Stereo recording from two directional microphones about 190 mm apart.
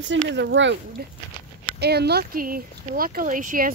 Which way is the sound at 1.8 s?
60° right (ahead or behind).